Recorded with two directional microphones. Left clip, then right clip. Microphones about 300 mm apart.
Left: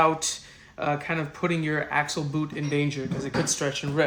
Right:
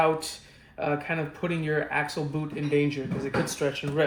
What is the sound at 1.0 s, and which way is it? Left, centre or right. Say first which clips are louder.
Speech: left 2 dB; left.